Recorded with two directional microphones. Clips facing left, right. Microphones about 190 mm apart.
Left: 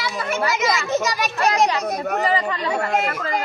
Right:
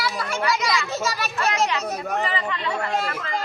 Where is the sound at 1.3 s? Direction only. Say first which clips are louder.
Left 5 dB; 35° left (ahead or behind).